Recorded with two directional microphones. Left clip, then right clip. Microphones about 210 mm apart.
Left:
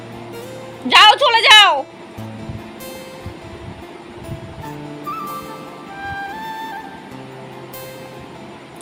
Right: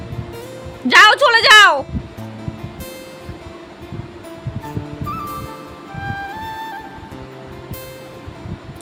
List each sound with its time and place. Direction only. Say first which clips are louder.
0.9 s music: even; 90° right
4.6 s music: even; centre (ahead or behind)